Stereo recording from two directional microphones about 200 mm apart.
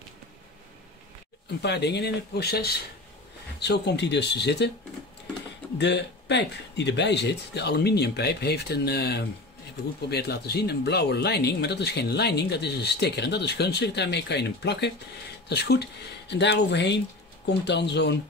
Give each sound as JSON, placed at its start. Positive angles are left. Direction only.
{"t": 1.6, "sound": "speech", "side_deg": 55}
{"t": 5.8, "sound": "speech", "side_deg": 60}